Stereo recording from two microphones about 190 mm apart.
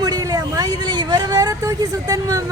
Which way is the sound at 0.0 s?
20° right (ahead or behind).